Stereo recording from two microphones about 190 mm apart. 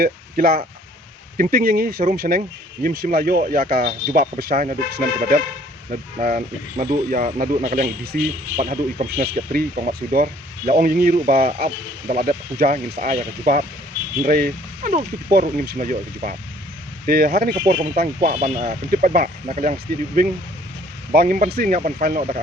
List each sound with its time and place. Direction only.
0.0 s a man's voice: 50° right (ahead or behind)
21.1 s a man's voice: 50° right (ahead or behind)